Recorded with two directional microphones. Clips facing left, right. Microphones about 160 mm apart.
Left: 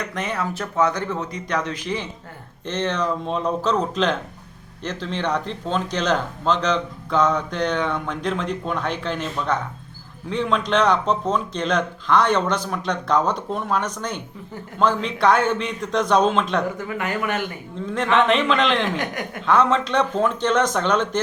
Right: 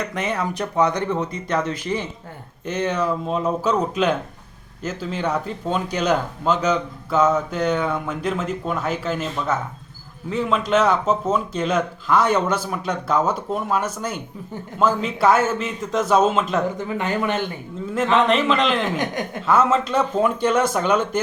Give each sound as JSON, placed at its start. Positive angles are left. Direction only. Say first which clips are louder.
{"t": 0.0, "sound": "a man's voice", "louder": "right 2 dB", "side_deg": -10}
{"t": 16.7, "sound": "speech", "louder": "right 2 dB", "side_deg": -25}
{"t": 17.7, "sound": "a man's voice", "louder": "right 1 dB", "side_deg": -5}
{"t": 18.9, "sound": "speech", "louder": "right 2 dB", "side_deg": -20}
{"t": 19.5, "sound": "speech", "louder": "even", "side_deg": -5}